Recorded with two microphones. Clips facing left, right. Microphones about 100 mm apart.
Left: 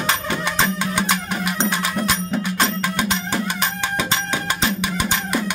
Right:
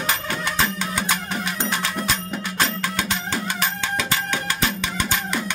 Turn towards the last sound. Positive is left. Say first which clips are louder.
# left 3 dB
turn(degrees=15)  # may be behind; listen again after turning